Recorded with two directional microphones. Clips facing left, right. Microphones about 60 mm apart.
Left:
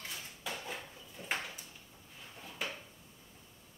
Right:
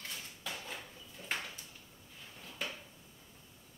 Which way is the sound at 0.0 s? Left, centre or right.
Centre.